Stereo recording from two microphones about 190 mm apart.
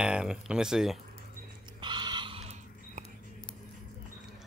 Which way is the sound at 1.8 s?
25° right (ahead or behind).